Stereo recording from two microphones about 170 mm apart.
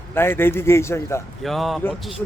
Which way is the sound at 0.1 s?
15° left (ahead or behind).